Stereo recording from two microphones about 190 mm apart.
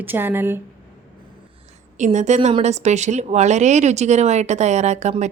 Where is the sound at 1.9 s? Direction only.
40° right (ahead or behind).